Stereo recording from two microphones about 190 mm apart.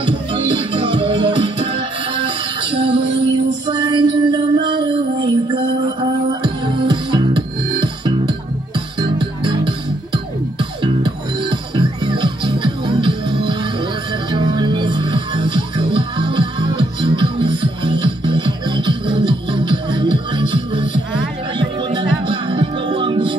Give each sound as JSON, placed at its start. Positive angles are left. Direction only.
{"t": 0.0, "sound": "music", "side_deg": -30}